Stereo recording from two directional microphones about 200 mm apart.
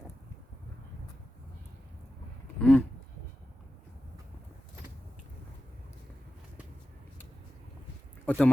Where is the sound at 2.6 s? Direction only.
5° left (ahead or behind).